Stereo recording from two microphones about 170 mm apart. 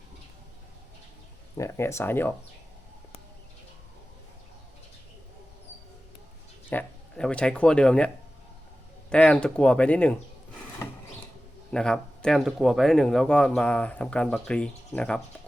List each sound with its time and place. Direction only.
1.5 s speech: 15° left (ahead or behind)
6.7 s speech: 10° left (ahead or behind)
11.7 s speech: 5° left (ahead or behind)